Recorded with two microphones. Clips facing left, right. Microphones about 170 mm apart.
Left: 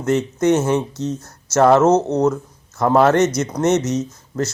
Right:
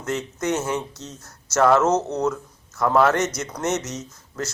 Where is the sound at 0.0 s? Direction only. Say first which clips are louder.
Left 9 dB; 25° left (ahead or behind).